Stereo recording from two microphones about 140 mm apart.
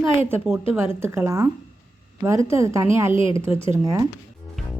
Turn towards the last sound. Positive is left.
turn(degrees=-20)  # may be behind; listen again after turning